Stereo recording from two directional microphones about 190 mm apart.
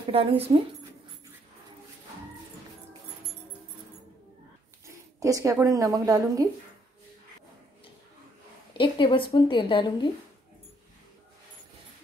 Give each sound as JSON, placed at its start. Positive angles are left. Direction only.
{"t": 0.1, "sound": "speech", "side_deg": -30}
{"t": 4.8, "sound": "speech", "side_deg": -15}
{"t": 8.7, "sound": "a woman's voice", "side_deg": 25}